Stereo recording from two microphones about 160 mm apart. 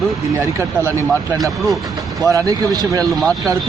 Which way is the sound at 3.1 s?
Centre (ahead or behind).